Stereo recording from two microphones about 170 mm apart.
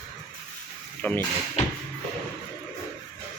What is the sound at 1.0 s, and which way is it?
Speech, 10° left (ahead or behind).